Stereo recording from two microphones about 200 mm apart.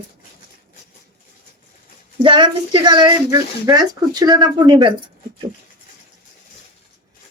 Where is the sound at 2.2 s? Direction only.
25° right (ahead or behind).